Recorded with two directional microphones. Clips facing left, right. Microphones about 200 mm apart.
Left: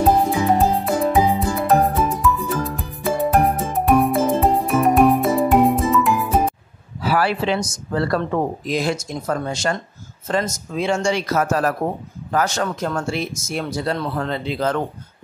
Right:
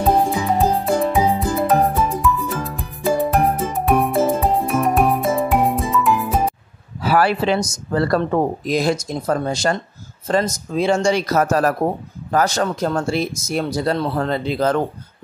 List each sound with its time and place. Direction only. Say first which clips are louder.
0.5 s music: even; centre (ahead or behind)
7.0 s speech: right 3 dB; 45° right (ahead or behind)